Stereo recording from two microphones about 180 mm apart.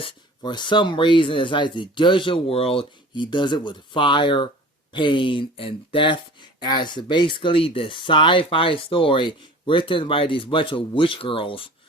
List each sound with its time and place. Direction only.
0.0 s speech: 25° left (ahead or behind)